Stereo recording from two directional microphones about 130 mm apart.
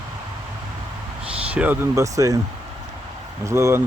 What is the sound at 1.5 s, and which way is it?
Speech, 10° right (ahead or behind).